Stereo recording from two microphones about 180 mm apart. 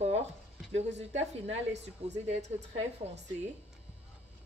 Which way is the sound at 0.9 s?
40° right (ahead or behind).